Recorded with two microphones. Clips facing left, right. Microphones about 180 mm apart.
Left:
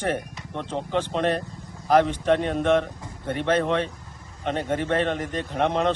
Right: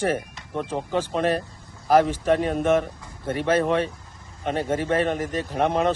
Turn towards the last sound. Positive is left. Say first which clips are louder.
# right 1 dB
turn(degrees=-10)  # may be behind; listen again after turning